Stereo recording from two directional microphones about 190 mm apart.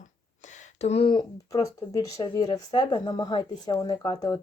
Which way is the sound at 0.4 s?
40° left (ahead or behind).